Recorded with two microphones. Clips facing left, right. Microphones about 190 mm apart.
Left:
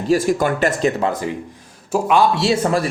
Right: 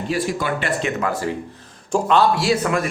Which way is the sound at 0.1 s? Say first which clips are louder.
Left 7 dB; 45° left (ahead or behind).